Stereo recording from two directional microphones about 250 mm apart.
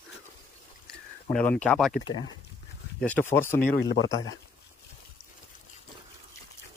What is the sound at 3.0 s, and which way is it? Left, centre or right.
Speech, centre.